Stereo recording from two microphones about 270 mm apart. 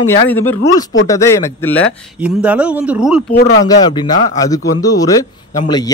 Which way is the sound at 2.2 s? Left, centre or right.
Centre.